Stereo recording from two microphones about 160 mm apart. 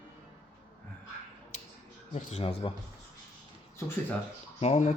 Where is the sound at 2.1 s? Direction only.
45° left (ahead or behind).